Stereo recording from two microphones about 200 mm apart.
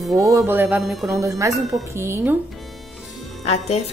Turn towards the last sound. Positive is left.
turn(degrees=35)  # may be behind; listen again after turning